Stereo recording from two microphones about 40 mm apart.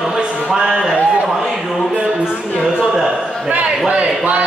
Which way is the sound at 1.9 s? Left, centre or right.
Right.